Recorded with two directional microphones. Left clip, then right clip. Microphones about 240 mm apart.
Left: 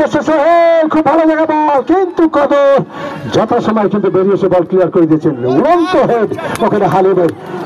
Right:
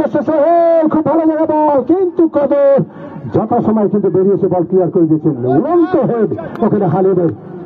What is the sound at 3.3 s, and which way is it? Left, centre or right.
A man's voice, left.